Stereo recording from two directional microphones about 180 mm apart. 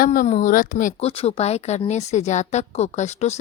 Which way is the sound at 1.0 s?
35° left (ahead or behind).